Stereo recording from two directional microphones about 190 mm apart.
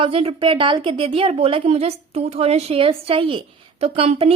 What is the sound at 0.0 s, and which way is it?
A woman's voice, 30° right (ahead or behind).